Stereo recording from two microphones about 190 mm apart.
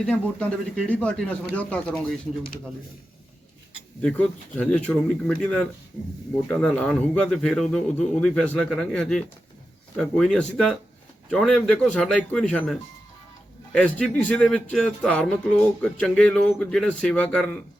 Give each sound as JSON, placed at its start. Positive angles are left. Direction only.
{"t": 0.0, "sound": "speech", "side_deg": 5}
{"t": 4.0, "sound": "speech", "side_deg": 5}